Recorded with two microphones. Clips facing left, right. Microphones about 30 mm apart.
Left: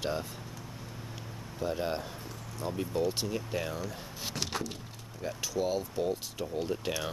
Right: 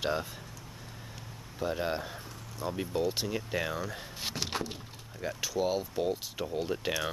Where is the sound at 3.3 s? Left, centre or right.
Centre.